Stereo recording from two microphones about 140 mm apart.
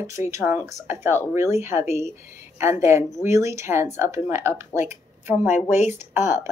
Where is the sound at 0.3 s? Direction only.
20° right (ahead or behind).